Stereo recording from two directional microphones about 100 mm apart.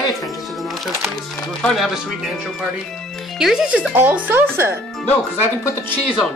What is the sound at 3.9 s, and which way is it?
Speech, 15° right (ahead or behind).